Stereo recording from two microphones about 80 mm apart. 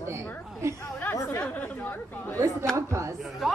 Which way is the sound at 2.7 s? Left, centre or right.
Right.